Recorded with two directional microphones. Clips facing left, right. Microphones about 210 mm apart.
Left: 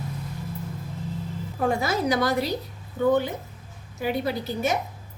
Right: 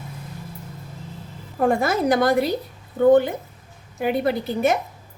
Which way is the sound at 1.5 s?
55° right (ahead or behind).